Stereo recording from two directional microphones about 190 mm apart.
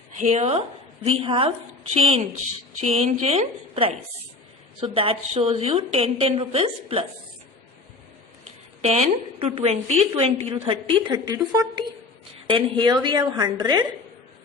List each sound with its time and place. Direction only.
0.2 s a woman's voice: 35° right (ahead or behind)
8.4 s a woman's voice: 35° right (ahead or behind)